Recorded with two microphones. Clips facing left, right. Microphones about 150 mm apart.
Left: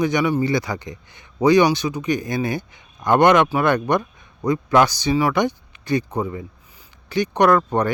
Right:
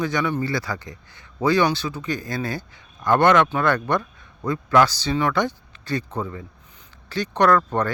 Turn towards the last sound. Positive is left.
turn(degrees=15)  # may be behind; listen again after turning